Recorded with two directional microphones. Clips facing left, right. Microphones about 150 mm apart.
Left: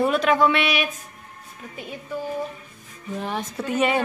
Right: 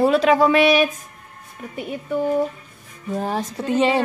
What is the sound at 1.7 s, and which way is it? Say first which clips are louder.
Speech: right 7 dB; 60° right (ahead or behind).